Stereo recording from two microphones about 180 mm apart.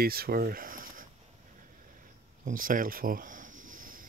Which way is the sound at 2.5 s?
50° right (ahead or behind).